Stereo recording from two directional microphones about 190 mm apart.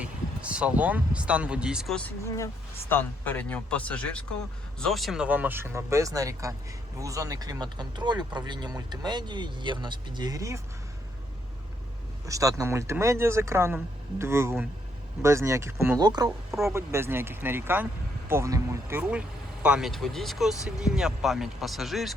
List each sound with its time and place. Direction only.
0.0 s speech: 5° right (ahead or behind)
2.0 s speech: 15° left (ahead or behind); by 10.6 s 15° right (ahead or behind)
12.2 s speech: 15° right (ahead or behind); by 22.1 s centre (ahead or behind)